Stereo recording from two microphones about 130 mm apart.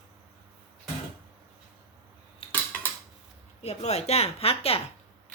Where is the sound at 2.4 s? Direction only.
45° left (ahead or behind).